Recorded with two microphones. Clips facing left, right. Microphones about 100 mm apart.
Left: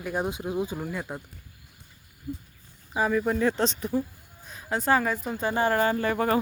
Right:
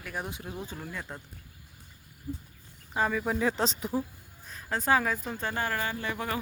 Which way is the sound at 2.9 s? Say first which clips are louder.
Left 4 dB; 5° left (ahead or behind).